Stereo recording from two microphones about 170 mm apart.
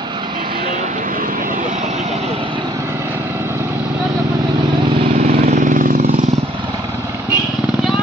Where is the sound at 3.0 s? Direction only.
15° right (ahead or behind).